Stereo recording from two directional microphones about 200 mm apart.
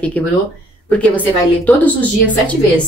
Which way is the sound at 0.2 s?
5° left (ahead or behind).